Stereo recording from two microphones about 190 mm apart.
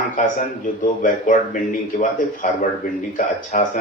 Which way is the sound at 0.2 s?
45° left (ahead or behind).